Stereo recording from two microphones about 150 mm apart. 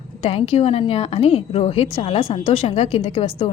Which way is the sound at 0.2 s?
40° left (ahead or behind).